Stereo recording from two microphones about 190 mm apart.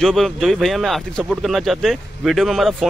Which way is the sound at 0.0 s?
Centre (ahead or behind).